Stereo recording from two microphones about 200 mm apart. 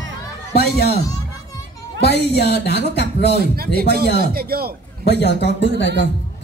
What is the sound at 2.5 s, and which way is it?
Speech, 55° left (ahead or behind).